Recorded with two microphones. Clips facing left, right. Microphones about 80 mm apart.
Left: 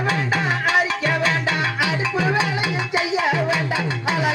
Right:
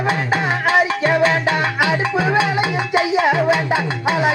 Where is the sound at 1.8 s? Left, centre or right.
Right.